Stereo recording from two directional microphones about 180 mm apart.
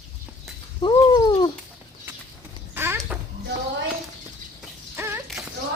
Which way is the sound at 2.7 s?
10° right (ahead or behind).